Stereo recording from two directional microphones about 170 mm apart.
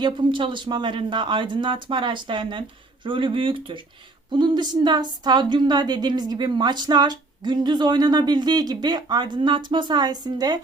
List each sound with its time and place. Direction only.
0.0 s speech: 30° right (ahead or behind)